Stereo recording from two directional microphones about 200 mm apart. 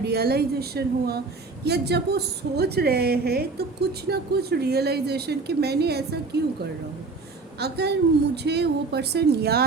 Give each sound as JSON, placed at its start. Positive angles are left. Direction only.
{"t": 0.0, "sound": "a woman's voice", "side_deg": -55}
{"t": 7.6, "sound": "a woman's voice", "side_deg": -55}